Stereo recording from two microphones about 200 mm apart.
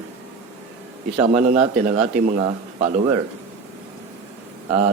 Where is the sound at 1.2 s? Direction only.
40° right (ahead or behind).